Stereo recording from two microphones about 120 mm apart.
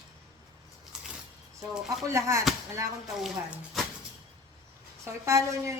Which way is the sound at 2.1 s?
25° right (ahead or behind).